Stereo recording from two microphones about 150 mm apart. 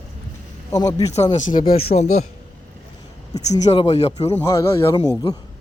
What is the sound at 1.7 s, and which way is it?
Speech, 45° left (ahead or behind).